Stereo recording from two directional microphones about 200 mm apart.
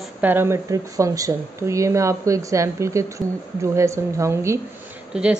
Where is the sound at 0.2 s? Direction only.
10° right (ahead or behind).